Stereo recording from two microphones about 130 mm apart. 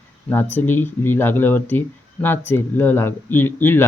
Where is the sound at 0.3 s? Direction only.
15° left (ahead or behind).